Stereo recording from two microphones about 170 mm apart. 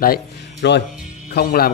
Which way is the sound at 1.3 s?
65° left (ahead or behind).